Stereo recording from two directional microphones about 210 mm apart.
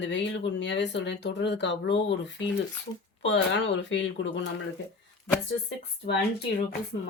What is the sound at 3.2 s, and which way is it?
Speech, 60° left (ahead or behind).